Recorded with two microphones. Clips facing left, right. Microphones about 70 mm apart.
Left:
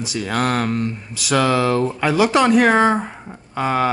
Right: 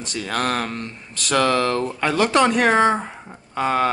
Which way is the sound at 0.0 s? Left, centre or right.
Centre.